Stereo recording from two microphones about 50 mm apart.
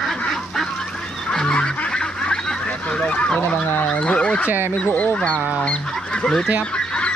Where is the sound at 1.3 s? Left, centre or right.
Centre.